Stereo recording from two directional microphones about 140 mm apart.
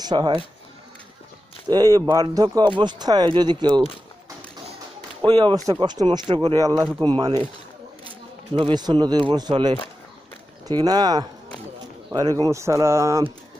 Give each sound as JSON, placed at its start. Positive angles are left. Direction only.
{"t": 0.0, "sound": "speech", "side_deg": -30}
{"t": 1.7, "sound": "speech", "side_deg": -25}
{"t": 5.2, "sound": "speech", "side_deg": -35}
{"t": 8.5, "sound": "speech", "side_deg": -35}